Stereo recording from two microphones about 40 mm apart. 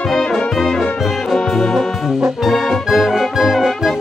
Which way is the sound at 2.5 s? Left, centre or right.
Centre.